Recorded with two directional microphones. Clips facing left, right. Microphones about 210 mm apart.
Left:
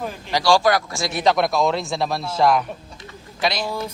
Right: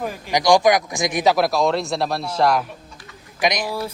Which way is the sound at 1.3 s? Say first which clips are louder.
Right 1 dB; centre (ahead or behind).